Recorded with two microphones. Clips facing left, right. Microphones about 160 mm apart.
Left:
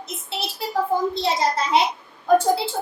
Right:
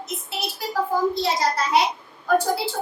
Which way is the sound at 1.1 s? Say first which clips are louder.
Left 1 dB; 25° left (ahead or behind).